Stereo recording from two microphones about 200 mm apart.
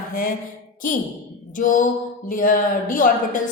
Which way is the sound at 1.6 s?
40° left (ahead or behind).